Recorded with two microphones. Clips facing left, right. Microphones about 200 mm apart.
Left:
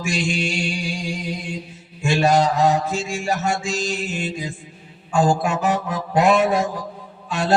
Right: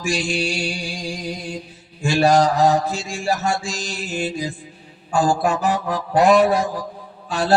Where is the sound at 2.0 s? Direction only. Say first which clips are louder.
Right 2 dB; 35° right (ahead or behind).